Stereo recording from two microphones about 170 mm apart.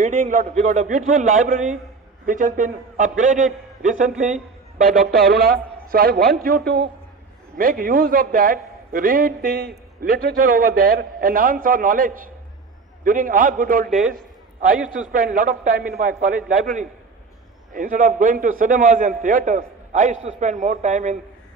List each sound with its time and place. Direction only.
0.0 s a man's voice: 50° right (ahead or behind)
4.8 s a man's voice: 60° right (ahead or behind)
14.1 s a sound: 55° right (ahead or behind)
15.1 s a man's voice: 55° right (ahead or behind)